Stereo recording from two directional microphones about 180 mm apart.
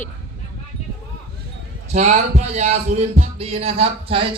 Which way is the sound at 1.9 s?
40° right (ahead or behind).